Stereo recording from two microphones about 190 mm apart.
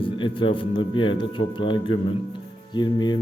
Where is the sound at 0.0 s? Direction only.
25° left (ahead or behind).